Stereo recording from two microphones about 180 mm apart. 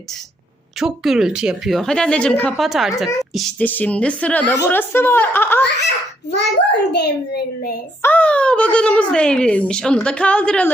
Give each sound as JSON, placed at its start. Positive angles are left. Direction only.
{"t": 0.8, "sound": "a woman's voice", "side_deg": 0}
{"t": 3.6, "sound": "speech", "side_deg": 10}
{"t": 6.3, "sound": "a child's voice", "side_deg": 70}
{"t": 8.0, "sound": "speech", "side_deg": 10}